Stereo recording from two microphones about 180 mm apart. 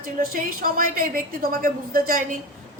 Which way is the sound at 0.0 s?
50° right (ahead or behind).